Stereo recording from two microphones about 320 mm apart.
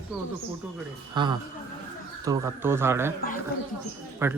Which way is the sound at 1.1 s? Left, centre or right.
Centre.